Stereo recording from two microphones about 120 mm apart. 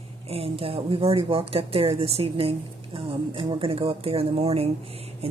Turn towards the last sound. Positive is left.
turn(degrees=-60)  # may be behind; listen again after turning